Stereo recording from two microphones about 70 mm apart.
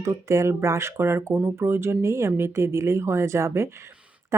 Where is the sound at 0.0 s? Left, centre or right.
Right.